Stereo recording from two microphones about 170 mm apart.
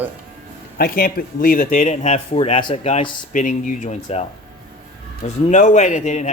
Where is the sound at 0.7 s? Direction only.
60° left (ahead or behind); by 2.2 s 45° left (ahead or behind).